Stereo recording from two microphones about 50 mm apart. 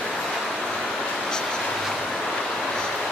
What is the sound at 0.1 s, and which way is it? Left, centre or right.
Vehicle, centre.